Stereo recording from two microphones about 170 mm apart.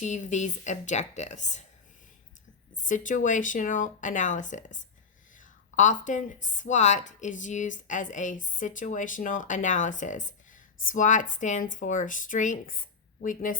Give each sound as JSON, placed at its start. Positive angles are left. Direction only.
{"t": 0.0, "sound": "a woman's voice", "side_deg": 45}
{"t": 2.8, "sound": "a woman's voice", "side_deg": 50}